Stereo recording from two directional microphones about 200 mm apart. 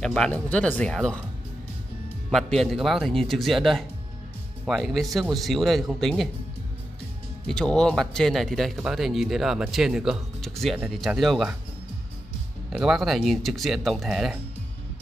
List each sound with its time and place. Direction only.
0.0 s speech: 5° left (ahead or behind)
2.3 s speech: centre (ahead or behind)
7.4 s speech: 5° left (ahead or behind)
12.6 s speech: centre (ahead or behind)